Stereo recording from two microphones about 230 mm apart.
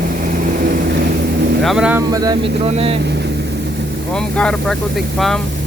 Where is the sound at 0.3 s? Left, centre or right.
Right.